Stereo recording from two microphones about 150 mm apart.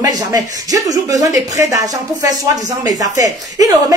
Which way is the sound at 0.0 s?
25° right (ahead or behind).